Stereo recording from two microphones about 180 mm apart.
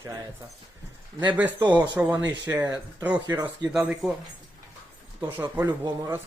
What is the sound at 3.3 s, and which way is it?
Speech, 20° right (ahead or behind).